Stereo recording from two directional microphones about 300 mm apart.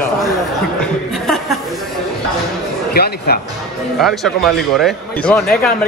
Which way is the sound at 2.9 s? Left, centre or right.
Left.